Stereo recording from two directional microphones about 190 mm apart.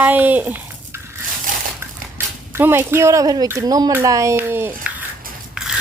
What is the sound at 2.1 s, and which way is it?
Speech, 10° right (ahead or behind).